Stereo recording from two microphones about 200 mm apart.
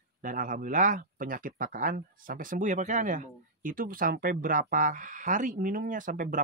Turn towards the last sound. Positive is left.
turn(degrees=-45)  # may be behind; listen again after turning